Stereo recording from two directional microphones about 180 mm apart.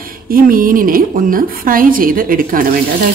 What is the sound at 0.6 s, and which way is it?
Speech, 50° right (ahead or behind).